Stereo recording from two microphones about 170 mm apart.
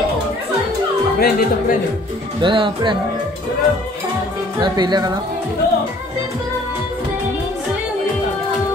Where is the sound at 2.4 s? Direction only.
30° right (ahead or behind).